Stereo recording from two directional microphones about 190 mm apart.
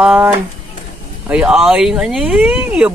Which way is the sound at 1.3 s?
5° right (ahead or behind).